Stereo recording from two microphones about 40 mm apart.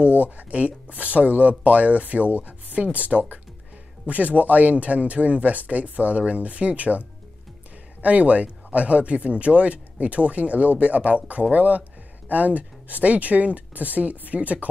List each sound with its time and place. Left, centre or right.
0.2 s speech: right